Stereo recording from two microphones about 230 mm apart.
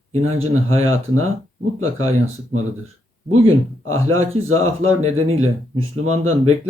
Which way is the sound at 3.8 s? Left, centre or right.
Right.